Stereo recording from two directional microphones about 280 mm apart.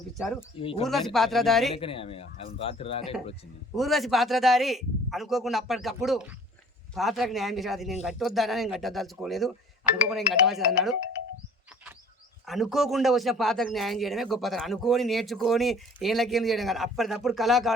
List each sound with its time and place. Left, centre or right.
0.2 s a man's voice: centre
0.6 s speech: centre
0.9 s a man's voice: centre
1.7 s speech: centre
3.8 s a man's voice: centre
12.5 s a man's voice: centre